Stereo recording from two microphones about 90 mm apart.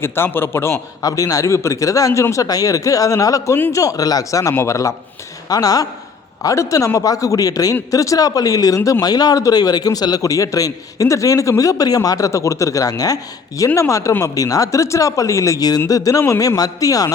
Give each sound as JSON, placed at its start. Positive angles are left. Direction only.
{"t": 0.0, "sound": "a man's voice", "side_deg": 25}
{"t": 1.0, "sound": "a man's voice", "side_deg": 40}